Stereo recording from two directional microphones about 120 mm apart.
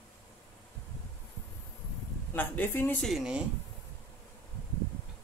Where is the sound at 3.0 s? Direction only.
5° right (ahead or behind).